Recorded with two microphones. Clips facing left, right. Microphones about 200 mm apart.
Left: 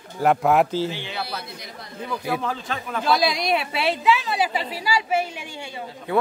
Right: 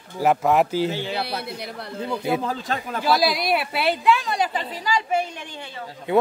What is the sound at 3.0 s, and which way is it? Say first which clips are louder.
A woman's voice: right 1 dB; centre (ahead or behind).